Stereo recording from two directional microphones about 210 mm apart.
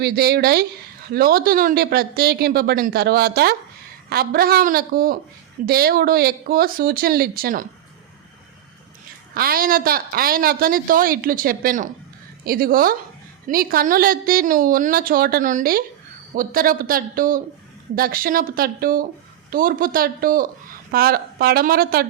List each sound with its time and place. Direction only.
0.0 s a woman's voice: 45° right (ahead or behind)
9.3 s a woman's voice: 45° right (ahead or behind)